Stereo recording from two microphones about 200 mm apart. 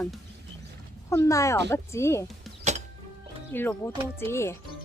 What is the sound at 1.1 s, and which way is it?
Speech, 15° left (ahead or behind).